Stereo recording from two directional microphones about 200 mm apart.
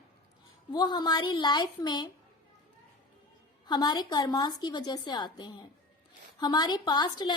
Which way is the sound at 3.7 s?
20° left (ahead or behind).